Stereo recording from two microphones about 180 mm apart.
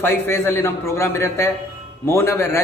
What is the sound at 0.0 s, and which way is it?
A man's voice, 10° left (ahead or behind).